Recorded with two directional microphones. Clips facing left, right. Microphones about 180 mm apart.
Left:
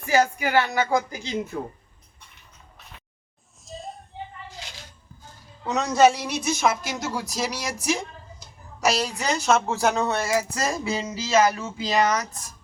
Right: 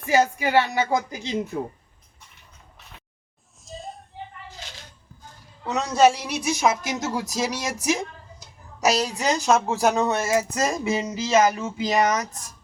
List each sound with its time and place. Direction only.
0.0 s speech: 25° right (ahead or behind)
3.7 s a sound: centre (ahead or behind)
5.6 s speech: 10° right (ahead or behind); by 7.8 s 25° right (ahead or behind)
8.8 s speech: 20° right (ahead or behind)